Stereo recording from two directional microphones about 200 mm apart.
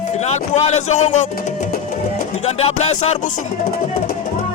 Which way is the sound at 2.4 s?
30° left (ahead or behind).